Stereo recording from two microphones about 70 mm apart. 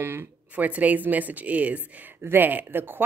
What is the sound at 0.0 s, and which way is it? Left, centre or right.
Speech, right.